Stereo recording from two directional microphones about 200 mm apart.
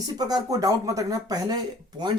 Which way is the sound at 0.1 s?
20° right (ahead or behind).